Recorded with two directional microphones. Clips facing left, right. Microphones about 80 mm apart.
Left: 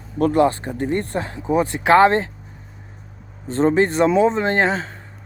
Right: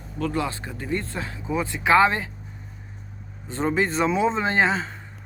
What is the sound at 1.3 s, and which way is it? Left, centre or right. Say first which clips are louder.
Speech: left 8 dB; left.